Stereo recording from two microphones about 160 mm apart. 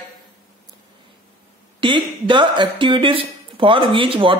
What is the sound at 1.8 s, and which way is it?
A man's voice, 30° right (ahead or behind).